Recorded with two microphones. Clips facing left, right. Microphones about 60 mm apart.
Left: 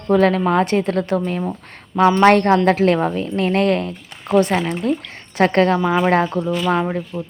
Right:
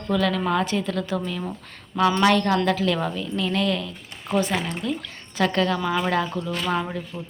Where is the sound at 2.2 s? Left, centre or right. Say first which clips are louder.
Left 8 dB; left.